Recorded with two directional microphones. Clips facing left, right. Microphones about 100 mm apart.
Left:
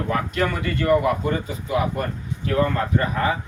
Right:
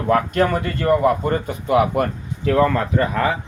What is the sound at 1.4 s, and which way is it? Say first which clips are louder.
Speech: right 6 dB; 65° right (ahead or behind).